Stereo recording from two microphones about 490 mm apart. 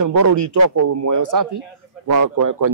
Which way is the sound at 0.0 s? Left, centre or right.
Right.